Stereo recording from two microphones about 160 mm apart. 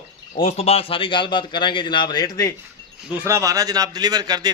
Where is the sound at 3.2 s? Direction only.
20° right (ahead or behind).